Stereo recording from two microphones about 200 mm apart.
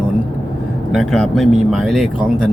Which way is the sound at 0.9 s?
Centre (ahead or behind).